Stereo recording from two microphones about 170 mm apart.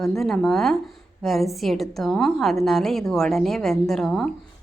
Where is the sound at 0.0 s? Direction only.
Centre (ahead or behind).